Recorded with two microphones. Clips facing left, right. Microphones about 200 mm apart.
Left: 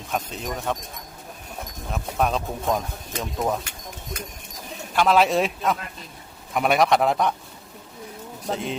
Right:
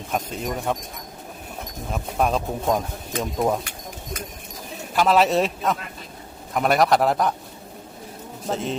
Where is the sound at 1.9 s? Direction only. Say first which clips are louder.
Right 1 dB; 5° right (ahead or behind).